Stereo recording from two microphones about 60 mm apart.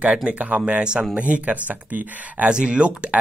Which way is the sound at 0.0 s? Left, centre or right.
Centre.